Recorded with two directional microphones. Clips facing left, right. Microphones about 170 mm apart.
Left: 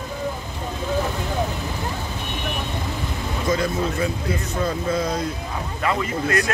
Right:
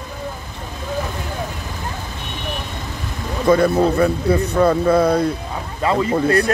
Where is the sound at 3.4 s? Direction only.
60° right (ahead or behind).